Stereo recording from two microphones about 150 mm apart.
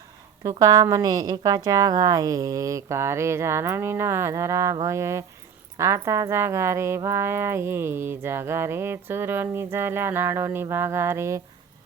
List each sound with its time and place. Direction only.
0.4 s a woman's voice: 25° right (ahead or behind)